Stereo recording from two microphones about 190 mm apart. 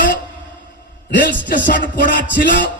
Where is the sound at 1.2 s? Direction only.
45° left (ahead or behind).